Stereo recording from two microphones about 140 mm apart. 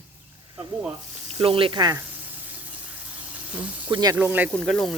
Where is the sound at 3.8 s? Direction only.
30° right (ahead or behind).